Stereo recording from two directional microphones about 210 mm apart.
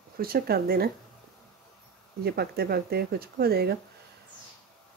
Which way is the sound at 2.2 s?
50° right (ahead or behind).